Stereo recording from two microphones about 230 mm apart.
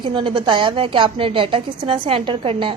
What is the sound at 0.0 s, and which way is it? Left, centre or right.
A woman's voice, right.